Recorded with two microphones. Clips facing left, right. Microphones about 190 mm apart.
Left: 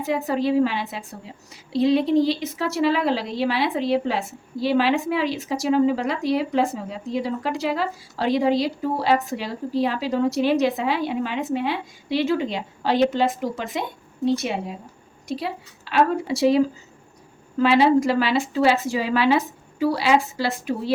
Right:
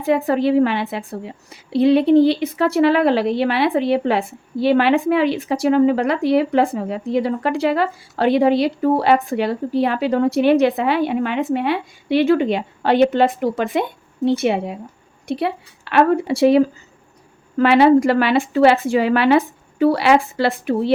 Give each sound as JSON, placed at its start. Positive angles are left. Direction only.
{"t": 0.0, "sound": "a woman's voice", "side_deg": -60}